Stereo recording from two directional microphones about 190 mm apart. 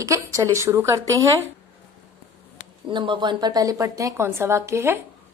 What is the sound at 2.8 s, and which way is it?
A woman's voice, 25° right (ahead or behind).